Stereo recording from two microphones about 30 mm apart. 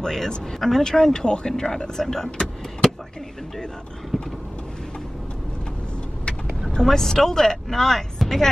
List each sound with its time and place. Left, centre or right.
0.0 s speech: centre
0.8 s speech: left
2.0 s speech: centre
4.1 s vehicle: left
6.7 s speech: centre
8.2 s music: centre